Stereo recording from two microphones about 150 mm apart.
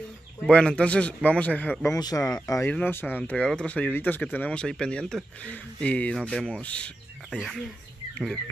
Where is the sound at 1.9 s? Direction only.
25° left (ahead or behind); by 6.9 s 5° left (ahead or behind).